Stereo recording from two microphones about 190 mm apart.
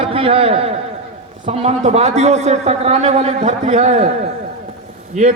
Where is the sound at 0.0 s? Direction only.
30° right (ahead or behind).